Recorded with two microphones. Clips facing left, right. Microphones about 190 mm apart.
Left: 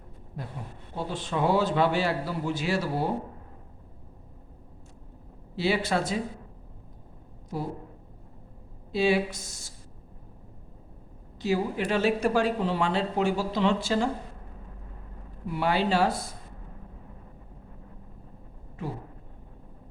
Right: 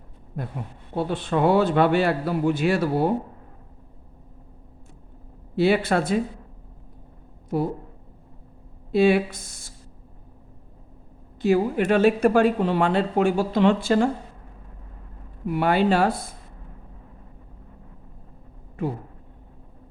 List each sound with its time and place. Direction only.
0.9 s speech: 60° right (ahead or behind)
5.5 s speech: 55° right (ahead or behind)
7.5 s speech: 60° right (ahead or behind)
8.9 s speech: 55° right (ahead or behind)
11.3 s speech: 55° right (ahead or behind)
15.4 s speech: 55° right (ahead or behind)